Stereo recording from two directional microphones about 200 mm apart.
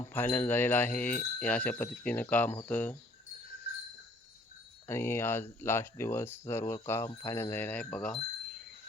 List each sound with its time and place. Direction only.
0.1 s speech: 10° left (ahead or behind)
4.9 s speech: 10° left (ahead or behind)